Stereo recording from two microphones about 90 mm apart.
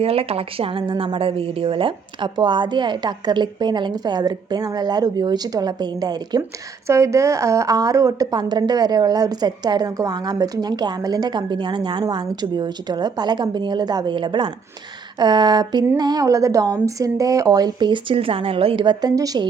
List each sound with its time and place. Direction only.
0.0 s a woman's voice: 90° right; by 6.4 s 50° right (ahead or behind)
6.8 s a woman's voice: 35° right (ahead or behind); by 14.5 s 65° right (ahead or behind)
15.2 s a woman's voice: 50° right (ahead or behind)
16.2 s a woman's voice: 35° right (ahead or behind); by 19.1 s 60° right (ahead or behind)
19.1 s a woman's voice: 40° right (ahead or behind)